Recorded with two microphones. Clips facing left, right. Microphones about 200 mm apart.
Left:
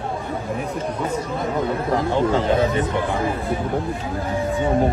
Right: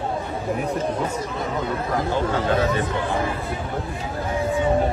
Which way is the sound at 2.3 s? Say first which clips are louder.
Left 2 dB; 25° left (ahead or behind).